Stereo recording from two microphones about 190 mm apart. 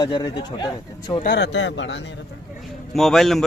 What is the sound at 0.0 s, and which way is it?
Speech, 20° left (ahead or behind).